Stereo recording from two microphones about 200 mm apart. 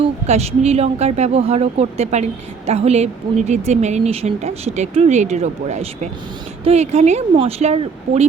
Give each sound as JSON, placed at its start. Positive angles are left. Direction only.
{"t": 0.0, "sound": "speech", "side_deg": -30}